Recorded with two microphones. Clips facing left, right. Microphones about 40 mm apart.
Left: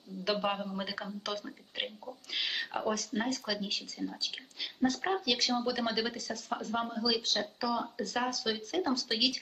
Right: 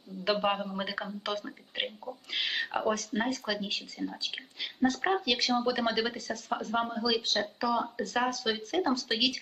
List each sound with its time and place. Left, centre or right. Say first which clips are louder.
0.3 s speech: right 3 dB; centre
1.3 s speech: right 3 dB; centre
1.7 s speech: right 3 dB; centre
2.3 s speech: right 3 dB; centre
6.7 s speech: right 3 dB; centre
7.3 s speech: right 3 dB; centre
8.0 s speech: right 3 dB; centre